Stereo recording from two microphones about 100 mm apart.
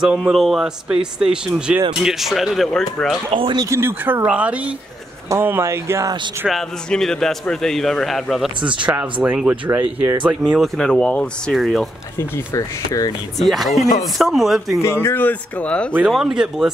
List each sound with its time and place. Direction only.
0.0 s a man's voice: 5° right (ahead or behind)
3.3 s speech: 60° right (ahead or behind)
3.6 s speech: 25° right (ahead or behind)
5.3 s speech: 25° right (ahead or behind)
6.5 s a man's voice: 5° left (ahead or behind)
8.7 s speech: 10° right (ahead or behind)
10.8 s speech: 5° left (ahead or behind)
11.5 s a man's voice: centre (ahead or behind)
12.2 s speech: 35° left (ahead or behind)
13.4 s a man's voice: centre (ahead or behind)
14.8 s speech: 25° left (ahead or behind)
16.1 s a man's voice: 5° right (ahead or behind)